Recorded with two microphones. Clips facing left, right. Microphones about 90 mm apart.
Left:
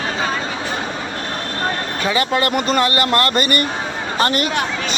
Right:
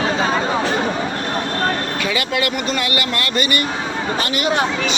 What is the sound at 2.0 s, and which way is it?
Speech, 35° left (ahead or behind).